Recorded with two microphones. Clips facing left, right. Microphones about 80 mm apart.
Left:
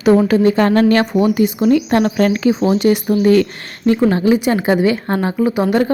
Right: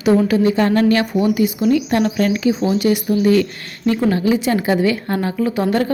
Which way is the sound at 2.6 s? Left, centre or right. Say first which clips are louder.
Left 3 dB; left.